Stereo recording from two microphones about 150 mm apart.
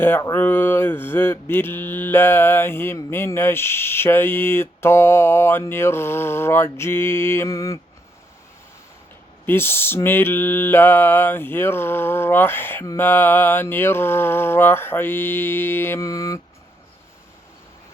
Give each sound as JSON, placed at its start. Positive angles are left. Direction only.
{"t": 0.0, "sound": "mantra", "side_deg": 20}
{"t": 9.5, "sound": "mantra", "side_deg": 15}